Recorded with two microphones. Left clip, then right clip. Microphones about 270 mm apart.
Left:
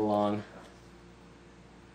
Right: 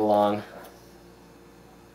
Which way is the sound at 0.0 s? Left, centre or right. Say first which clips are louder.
Right 7 dB; right.